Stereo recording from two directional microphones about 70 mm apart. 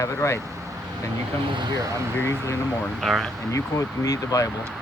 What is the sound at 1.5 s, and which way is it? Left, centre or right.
Speech, right.